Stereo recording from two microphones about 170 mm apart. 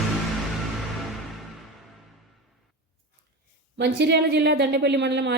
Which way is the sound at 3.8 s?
85° right.